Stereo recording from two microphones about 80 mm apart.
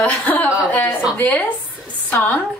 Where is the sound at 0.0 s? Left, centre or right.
Centre.